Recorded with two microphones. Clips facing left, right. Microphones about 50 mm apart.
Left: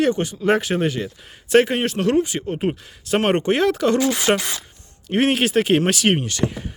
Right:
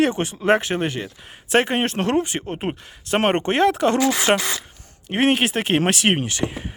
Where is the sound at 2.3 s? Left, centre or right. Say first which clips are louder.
Left 3 dB; centre.